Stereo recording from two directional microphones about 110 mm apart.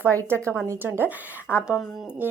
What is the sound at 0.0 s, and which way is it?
A woman's voice, 25° right (ahead or behind).